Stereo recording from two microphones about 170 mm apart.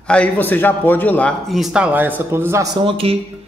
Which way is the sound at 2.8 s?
35° right (ahead or behind).